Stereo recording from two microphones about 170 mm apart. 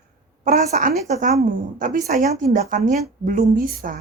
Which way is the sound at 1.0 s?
40° right (ahead or behind).